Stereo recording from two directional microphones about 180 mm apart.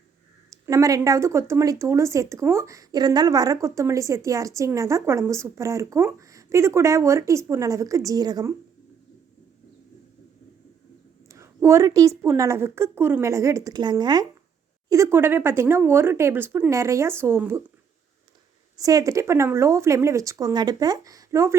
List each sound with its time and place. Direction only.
0.6 s speech: 20° right (ahead or behind)
11.3 s speech: 15° right (ahead or behind)
18.8 s speech: 20° right (ahead or behind)